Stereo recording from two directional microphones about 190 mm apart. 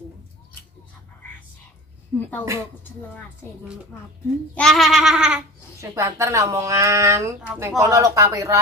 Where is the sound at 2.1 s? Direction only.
5° left (ahead or behind).